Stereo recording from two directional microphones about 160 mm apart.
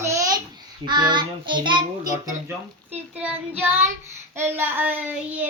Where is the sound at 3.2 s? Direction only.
10° right (ahead or behind).